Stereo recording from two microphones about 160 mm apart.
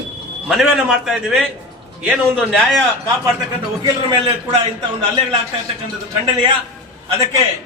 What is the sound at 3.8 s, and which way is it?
Speech, 25° right (ahead or behind).